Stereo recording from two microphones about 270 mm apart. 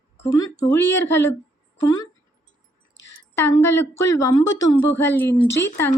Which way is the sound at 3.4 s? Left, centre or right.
Centre.